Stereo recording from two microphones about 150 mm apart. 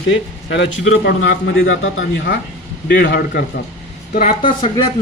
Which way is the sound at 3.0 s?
80° left.